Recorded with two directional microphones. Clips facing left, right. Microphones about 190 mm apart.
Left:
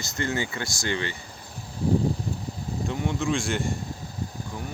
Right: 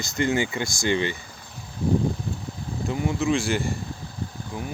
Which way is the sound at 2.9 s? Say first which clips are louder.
Right 4 dB; 5° right (ahead or behind).